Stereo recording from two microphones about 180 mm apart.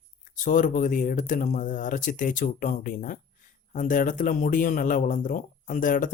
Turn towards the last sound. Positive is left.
turn(degrees=45)  # may be behind; listen again after turning